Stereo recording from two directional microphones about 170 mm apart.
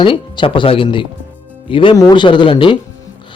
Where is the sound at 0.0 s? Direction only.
30° left (ahead or behind).